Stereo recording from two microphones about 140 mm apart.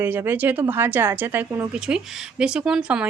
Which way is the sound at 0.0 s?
15° right (ahead or behind).